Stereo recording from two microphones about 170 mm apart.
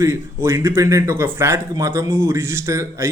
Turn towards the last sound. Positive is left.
turn(degrees=-15)  # may be behind; listen again after turning